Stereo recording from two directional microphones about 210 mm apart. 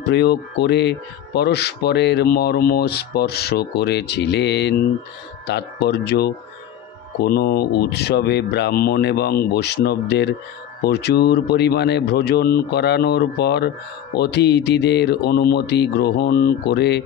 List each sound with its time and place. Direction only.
0.1 s speech: 50° left (ahead or behind)